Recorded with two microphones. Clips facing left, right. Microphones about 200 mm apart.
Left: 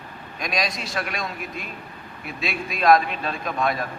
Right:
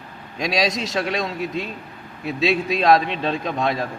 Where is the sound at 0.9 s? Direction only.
25° right (ahead or behind).